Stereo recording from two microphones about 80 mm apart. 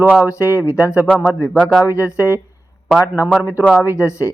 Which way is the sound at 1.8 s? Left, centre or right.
Left.